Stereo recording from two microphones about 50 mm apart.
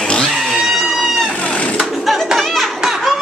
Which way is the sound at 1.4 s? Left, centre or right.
Left.